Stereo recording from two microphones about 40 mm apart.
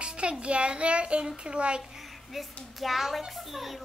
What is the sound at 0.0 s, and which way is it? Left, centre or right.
Child singing, right.